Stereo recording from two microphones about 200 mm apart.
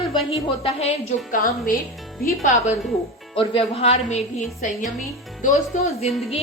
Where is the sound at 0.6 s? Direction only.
30° left (ahead or behind).